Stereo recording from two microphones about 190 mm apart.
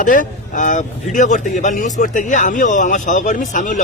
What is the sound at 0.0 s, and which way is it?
Speech, 45° left (ahead or behind).